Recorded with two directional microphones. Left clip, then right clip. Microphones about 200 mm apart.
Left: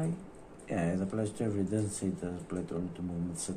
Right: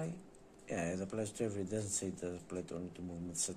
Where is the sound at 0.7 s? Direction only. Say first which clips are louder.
Left 5 dB; 35° right (ahead or behind).